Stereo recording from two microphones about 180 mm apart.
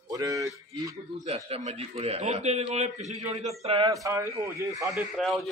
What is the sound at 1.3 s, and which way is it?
A man's voice, 35° right (ahead or behind).